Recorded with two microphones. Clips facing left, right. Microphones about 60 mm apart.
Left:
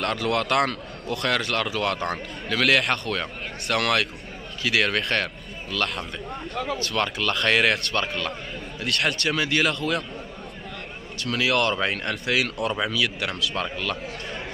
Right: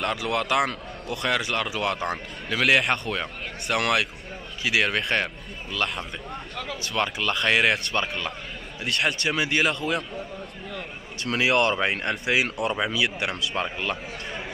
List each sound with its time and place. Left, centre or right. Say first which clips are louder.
0.0 s a man's voice: left 2 dB; centre
6.5 s speech: left 7 dB; centre
7.0 s a man's voice: right 1 dB; centre
11.2 s speech: right 1 dB; right